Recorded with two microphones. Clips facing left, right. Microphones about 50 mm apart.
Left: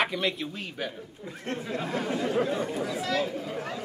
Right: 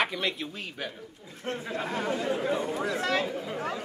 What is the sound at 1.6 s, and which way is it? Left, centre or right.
Speech, centre.